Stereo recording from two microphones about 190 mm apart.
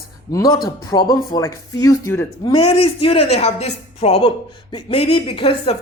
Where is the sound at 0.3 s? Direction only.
20° left (ahead or behind).